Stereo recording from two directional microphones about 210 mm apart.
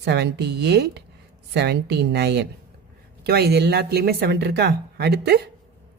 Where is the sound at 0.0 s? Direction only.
55° right (ahead or behind).